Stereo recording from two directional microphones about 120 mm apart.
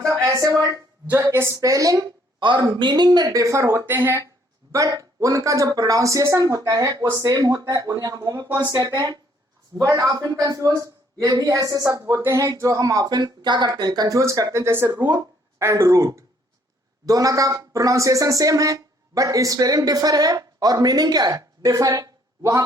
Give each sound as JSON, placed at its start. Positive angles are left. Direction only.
{"t": 0.0, "sound": "a sound", "side_deg": -25}
{"t": 1.2, "sound": "speech", "side_deg": -20}
{"t": 2.4, "sound": "speech", "side_deg": -40}
{"t": 14.9, "sound": "speech", "side_deg": -35}
{"t": 15.6, "sound": "speech", "side_deg": -25}